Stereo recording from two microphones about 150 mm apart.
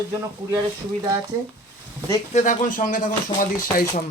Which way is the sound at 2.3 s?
60° left (ahead or behind).